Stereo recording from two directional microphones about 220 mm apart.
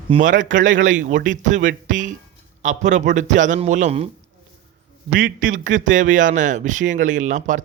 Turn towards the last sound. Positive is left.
turn(degrees=-35)  # may be behind; listen again after turning